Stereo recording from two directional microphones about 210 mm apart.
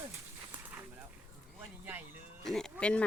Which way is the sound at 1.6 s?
10° right (ahead or behind).